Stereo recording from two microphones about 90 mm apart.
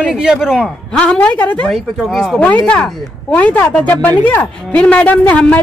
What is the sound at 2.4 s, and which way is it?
A woman's voice, 15° left (ahead or behind).